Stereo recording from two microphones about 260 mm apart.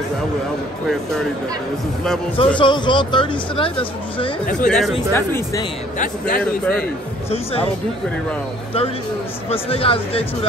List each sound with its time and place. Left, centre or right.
2.3 s speech: centre
4.6 s speech: centre
5.9 s a man's voice: left
9.5 s speech: left